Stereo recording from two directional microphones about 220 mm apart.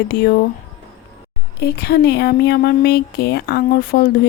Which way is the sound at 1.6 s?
45° left (ahead or behind).